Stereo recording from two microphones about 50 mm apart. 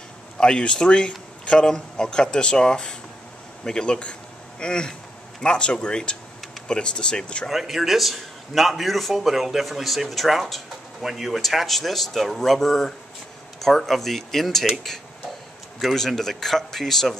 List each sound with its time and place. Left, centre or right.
0.4 s a man's voice: centre
7.4 s a man's voice: centre